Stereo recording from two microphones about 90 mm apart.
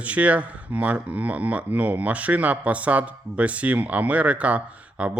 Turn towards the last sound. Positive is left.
turn(degrees=-15)  # may be behind; listen again after turning